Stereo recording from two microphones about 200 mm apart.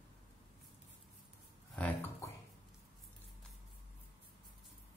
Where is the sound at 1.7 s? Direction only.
10° left (ahead or behind).